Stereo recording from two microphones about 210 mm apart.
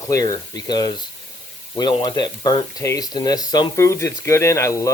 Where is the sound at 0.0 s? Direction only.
15° left (ahead or behind).